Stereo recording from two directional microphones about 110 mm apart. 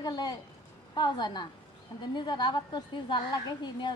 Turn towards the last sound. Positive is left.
turn(degrees=40)  # may be behind; listen again after turning